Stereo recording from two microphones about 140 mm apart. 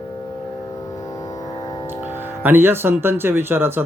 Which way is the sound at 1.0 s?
25° left (ahead or behind).